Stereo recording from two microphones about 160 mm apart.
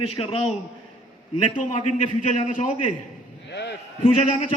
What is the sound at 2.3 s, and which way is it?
Speech, 45° left (ahead or behind).